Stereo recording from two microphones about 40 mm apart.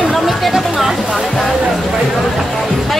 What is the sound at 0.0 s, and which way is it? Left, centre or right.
Music, centre.